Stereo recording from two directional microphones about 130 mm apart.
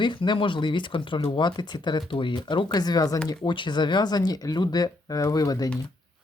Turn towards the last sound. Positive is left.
turn(degrees=30)  # may be behind; listen again after turning